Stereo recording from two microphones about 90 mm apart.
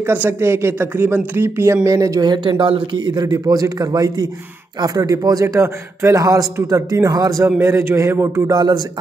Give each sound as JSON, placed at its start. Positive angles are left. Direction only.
{"t": 0.0, "sound": "speech", "side_deg": -25}
{"t": 1.9, "sound": "a man's voice", "side_deg": -40}
{"t": 7.4, "sound": "speech", "side_deg": -25}
{"t": 8.5, "sound": "speech", "side_deg": -45}